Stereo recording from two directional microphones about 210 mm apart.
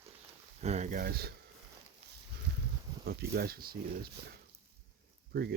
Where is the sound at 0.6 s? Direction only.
30° right (ahead or behind).